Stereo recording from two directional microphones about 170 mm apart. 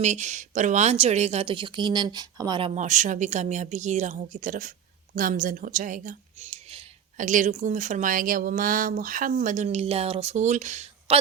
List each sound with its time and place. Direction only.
0.0 s a woman's voice: 45° right (ahead or behind)
7.2 s a woman's voice: 50° right (ahead or behind)